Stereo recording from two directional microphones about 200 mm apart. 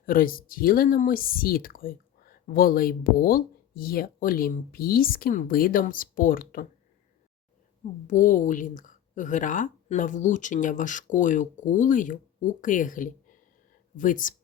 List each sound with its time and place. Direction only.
0.0 s speech: 45° left (ahead or behind)
8.0 s a woman's voice: 40° left (ahead or behind)